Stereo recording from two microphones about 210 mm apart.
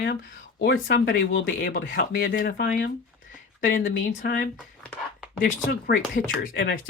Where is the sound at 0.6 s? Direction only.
50° left (ahead or behind).